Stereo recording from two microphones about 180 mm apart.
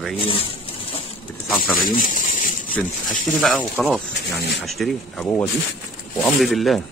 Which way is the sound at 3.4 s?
5° left (ahead or behind).